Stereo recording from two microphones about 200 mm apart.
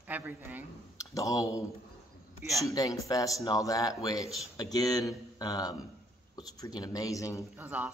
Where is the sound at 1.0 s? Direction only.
15° left (ahead or behind).